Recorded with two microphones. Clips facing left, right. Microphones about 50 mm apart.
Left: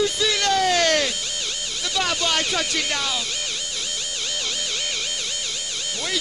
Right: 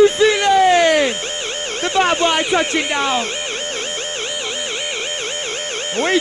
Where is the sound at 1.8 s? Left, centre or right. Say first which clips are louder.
Right 9 dB; right.